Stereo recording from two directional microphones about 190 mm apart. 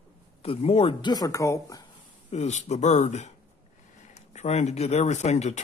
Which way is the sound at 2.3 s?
35° left (ahead or behind).